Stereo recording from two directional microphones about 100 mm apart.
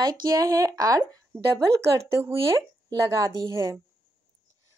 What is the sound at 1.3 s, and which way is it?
Speech, 30° right (ahead or behind).